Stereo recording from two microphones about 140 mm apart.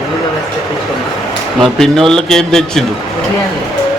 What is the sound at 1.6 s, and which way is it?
A man's voice, centre (ahead or behind).